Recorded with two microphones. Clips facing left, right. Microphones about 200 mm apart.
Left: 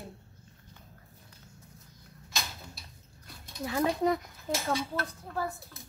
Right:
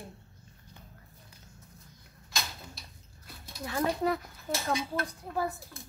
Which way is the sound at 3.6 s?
15° left (ahead or behind).